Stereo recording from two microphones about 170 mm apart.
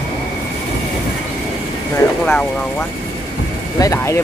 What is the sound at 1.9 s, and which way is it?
Speech, 10° left (ahead or behind).